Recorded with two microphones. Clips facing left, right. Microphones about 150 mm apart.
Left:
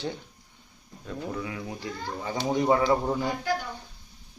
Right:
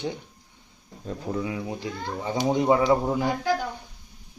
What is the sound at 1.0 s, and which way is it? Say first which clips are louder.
Speech: right 4 dB; 25° right (ahead or behind).